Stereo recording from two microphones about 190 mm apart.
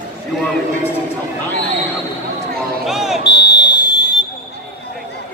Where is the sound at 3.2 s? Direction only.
25° left (ahead or behind).